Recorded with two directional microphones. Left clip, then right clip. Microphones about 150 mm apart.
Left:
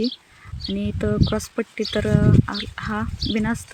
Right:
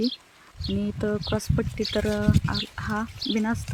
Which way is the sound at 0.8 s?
15° left (ahead or behind).